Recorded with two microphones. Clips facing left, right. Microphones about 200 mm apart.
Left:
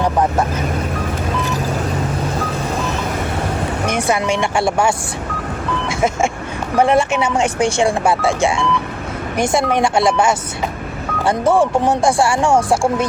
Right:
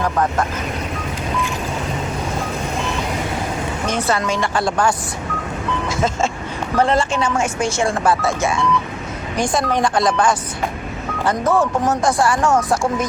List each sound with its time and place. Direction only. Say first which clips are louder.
3.8 s speech: left 2 dB; 15° left (ahead or behind)
4.6 s speech: left 1 dB; 25° left (ahead or behind)
6.7 s speech: left 3 dB; 10° left (ahead or behind)
8.0 s speech: left 2 dB; 25° left (ahead or behind)
10.1 s speech: left 2 dB; 10° left (ahead or behind)
11.3 s speech: left 3 dB; 30° left (ahead or behind)